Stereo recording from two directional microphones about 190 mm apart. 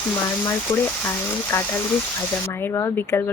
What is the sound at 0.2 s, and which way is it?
Speech, 15° left (ahead or behind).